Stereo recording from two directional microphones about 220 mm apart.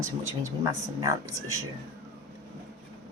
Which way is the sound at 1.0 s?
15° right (ahead or behind).